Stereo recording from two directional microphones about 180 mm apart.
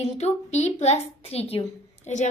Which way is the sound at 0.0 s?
35° left (ahead or behind).